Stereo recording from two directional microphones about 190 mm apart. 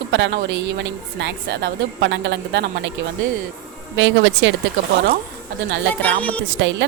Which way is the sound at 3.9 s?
80° right.